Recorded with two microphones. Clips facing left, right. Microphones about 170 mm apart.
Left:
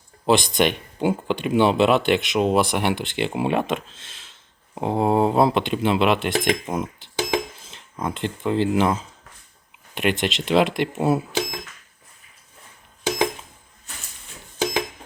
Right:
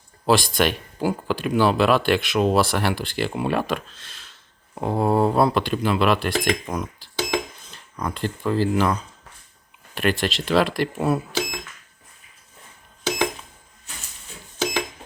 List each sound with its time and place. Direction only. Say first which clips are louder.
0.3 s speech: left 1 dB; 20° left (ahead or behind)